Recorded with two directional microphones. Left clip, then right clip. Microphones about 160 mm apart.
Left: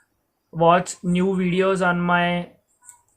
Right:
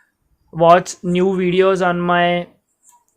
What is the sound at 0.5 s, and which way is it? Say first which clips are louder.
Speech: right 6 dB; 40° right (ahead or behind).